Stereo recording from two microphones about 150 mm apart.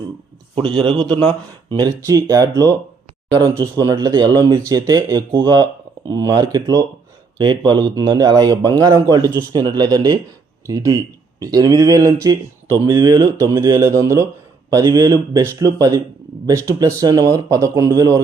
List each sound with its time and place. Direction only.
0.5 s a man's voice: 35° right (ahead or behind)